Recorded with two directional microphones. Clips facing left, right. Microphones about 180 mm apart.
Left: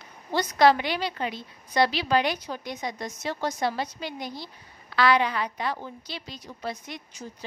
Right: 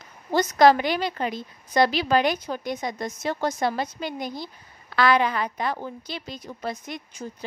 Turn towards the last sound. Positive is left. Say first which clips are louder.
# right 4 dB
turn(degrees=-50)  # may be behind; listen again after turning